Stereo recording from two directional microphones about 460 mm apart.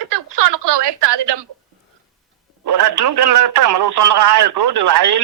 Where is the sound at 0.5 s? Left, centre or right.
Right.